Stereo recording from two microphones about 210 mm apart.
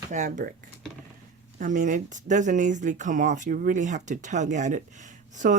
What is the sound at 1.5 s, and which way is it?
Speech, 35° right (ahead or behind).